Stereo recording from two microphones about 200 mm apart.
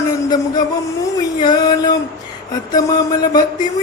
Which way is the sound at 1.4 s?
20° left (ahead or behind).